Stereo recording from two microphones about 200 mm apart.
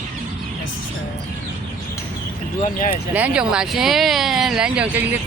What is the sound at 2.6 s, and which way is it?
Speech, 40° left (ahead or behind).